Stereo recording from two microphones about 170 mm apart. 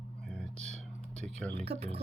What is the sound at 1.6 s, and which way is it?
Speech, 35° right (ahead or behind).